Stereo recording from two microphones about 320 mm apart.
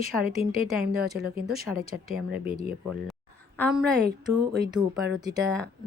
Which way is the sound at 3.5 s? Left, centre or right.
Centre.